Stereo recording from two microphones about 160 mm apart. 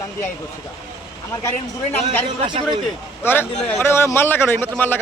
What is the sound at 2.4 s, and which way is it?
Speech, 30° right (ahead or behind).